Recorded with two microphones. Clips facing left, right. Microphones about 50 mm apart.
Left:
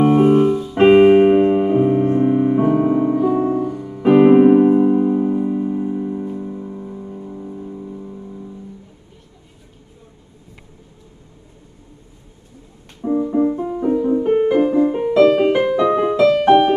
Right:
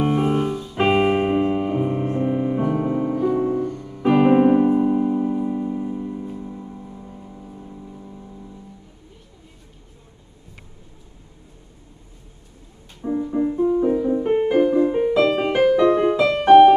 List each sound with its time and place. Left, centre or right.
0.0 s keyboard: centre
3.3 s music: left
3.6 s music: centre
4.6 s music: centre
13.0 s music: centre
16.4 s piano: centre